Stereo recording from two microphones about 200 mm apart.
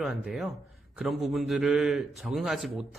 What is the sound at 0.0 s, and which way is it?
A man's voice, centre (ahead or behind).